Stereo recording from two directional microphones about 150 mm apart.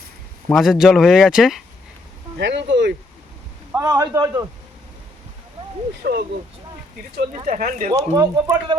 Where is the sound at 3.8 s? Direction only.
25° right (ahead or behind).